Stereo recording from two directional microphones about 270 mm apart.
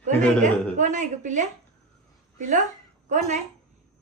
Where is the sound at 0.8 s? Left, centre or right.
Right.